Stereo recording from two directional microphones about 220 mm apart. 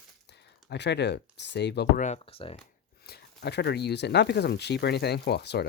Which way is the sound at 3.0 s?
45° left (ahead or behind).